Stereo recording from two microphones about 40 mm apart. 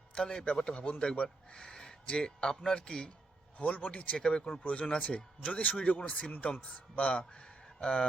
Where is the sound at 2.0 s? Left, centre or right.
Left.